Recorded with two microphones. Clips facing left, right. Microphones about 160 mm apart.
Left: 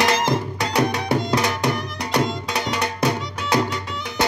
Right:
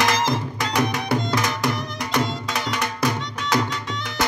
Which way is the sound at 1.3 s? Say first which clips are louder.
Left 2 dB; 35° left (ahead or behind).